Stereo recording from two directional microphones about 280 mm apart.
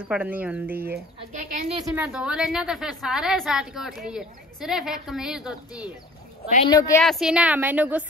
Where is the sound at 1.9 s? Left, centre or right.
Centre.